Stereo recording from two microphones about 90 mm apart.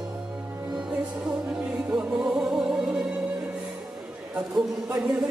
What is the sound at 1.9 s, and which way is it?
Music, 10° right (ahead or behind).